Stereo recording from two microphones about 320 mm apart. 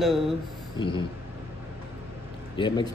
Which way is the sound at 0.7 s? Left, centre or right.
Centre.